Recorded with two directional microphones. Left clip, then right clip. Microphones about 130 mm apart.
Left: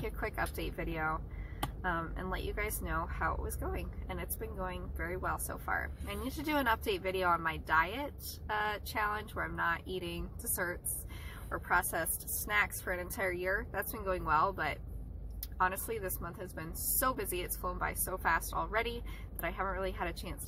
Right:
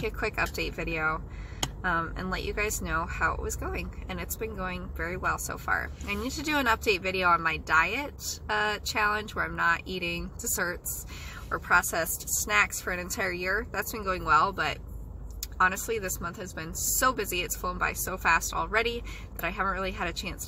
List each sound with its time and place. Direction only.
0.0 s speech: 25° right (ahead or behind)